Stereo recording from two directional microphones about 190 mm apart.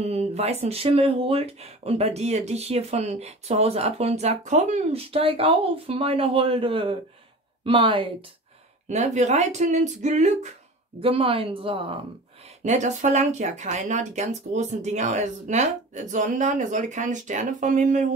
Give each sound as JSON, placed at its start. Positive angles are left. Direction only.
{"t": 0.0, "sound": "speech", "side_deg": -35}
{"t": 8.8, "sound": "speech", "side_deg": -40}
{"t": 12.6, "sound": "speech", "side_deg": -40}